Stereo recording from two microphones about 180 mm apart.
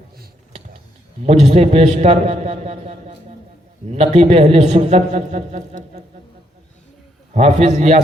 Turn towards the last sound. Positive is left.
turn(degrees=-40)  # may be behind; listen again after turning